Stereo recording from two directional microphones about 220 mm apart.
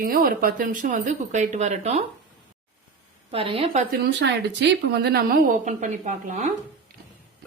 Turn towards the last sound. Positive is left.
turn(degrees=-35)  # may be behind; listen again after turning